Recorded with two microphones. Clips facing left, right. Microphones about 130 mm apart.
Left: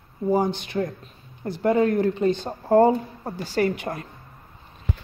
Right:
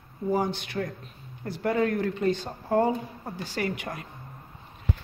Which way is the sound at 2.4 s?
40° left (ahead or behind).